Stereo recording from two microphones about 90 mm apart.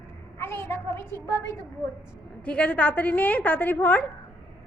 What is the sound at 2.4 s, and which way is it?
A woman's voice, 15° left (ahead or behind).